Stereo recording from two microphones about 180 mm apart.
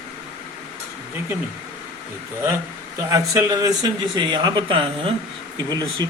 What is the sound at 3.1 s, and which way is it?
Speech, 20° right (ahead or behind).